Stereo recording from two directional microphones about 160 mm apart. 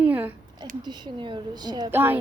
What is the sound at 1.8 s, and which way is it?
Speech, 15° right (ahead or behind).